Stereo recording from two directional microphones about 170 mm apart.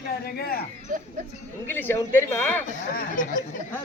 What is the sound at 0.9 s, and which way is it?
Speech, 50° right (ahead or behind).